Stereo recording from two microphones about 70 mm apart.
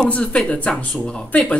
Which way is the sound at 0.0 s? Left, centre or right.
Centre.